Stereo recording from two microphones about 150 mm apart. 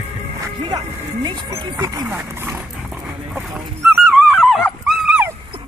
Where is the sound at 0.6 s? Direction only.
30° right (ahead or behind).